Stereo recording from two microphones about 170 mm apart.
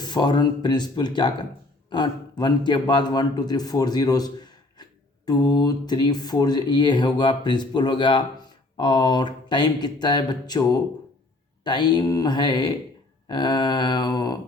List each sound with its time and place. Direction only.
0.0 s a man's voice: 25° left (ahead or behind)